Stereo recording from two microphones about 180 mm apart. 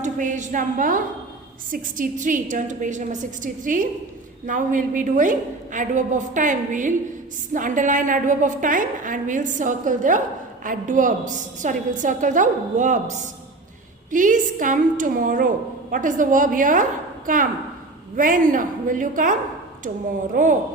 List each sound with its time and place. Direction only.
0.0 s a woman's voice: 45° right (ahead or behind)